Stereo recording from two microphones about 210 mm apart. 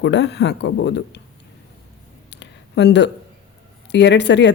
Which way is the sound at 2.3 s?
55° left (ahead or behind).